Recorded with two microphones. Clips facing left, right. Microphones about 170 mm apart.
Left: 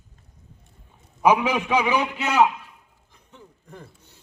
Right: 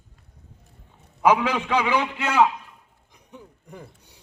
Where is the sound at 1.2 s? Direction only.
15° left (ahead or behind).